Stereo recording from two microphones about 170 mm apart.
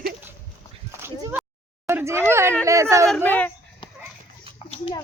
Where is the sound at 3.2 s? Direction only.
10° left (ahead or behind).